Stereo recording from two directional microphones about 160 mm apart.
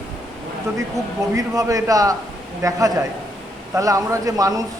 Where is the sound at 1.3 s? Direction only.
20° right (ahead or behind).